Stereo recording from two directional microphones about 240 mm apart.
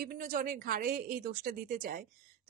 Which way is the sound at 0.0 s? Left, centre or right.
Right.